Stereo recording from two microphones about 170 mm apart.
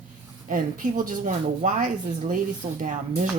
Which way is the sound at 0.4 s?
50° right (ahead or behind).